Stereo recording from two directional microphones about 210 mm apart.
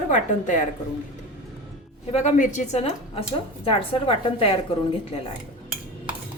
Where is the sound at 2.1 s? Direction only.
35° left (ahead or behind).